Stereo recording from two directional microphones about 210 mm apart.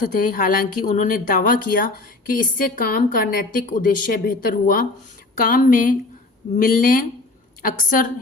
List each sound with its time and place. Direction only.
0.0 s speech: 40° left (ahead or behind)